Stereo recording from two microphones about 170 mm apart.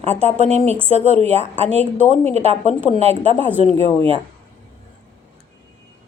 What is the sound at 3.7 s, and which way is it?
Speech, 20° left (ahead or behind).